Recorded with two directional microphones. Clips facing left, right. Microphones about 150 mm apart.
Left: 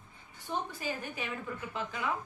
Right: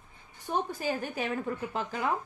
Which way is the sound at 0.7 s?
45° right (ahead or behind).